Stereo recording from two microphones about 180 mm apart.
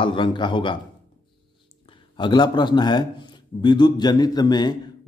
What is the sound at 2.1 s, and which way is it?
A man's voice, 25° left (ahead or behind).